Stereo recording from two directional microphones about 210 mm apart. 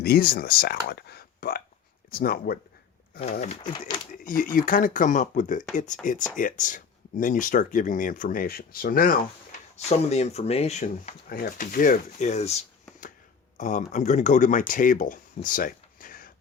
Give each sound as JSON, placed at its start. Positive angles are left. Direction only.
{"t": 0.0, "sound": "speech", "side_deg": 45}
{"t": 3.6, "sound": "speech", "side_deg": 20}
{"t": 4.2, "sound": "speech", "side_deg": 40}